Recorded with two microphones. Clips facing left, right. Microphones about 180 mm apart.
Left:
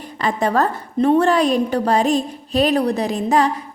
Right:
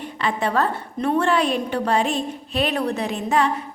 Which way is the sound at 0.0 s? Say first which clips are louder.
Left 3 dB; 40° left (ahead or behind).